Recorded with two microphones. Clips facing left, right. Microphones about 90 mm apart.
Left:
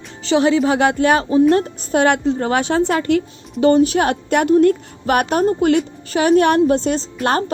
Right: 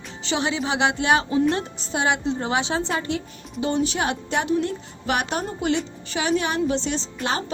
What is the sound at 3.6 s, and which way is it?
A woman's voice, 50° left (ahead or behind).